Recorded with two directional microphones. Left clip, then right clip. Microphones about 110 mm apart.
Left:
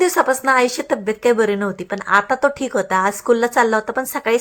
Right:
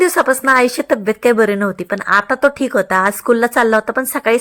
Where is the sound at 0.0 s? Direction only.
35° right (ahead or behind).